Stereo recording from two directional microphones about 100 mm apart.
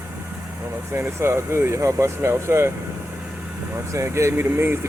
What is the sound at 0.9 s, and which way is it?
Speech, 25° right (ahead or behind).